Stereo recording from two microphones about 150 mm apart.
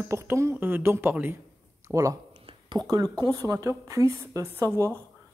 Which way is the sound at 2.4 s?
30° right (ahead or behind).